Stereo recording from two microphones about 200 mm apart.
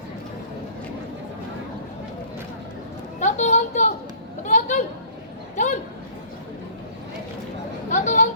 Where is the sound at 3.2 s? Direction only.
35° left (ahead or behind).